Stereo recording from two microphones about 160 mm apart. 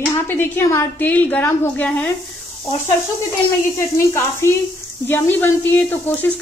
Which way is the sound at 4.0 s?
15° left (ahead or behind).